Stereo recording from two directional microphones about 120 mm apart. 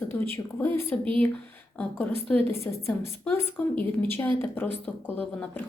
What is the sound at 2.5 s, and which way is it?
A woman's voice, 20° left (ahead or behind).